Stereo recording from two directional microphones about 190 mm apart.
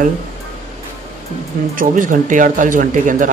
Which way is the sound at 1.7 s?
45° right (ahead or behind).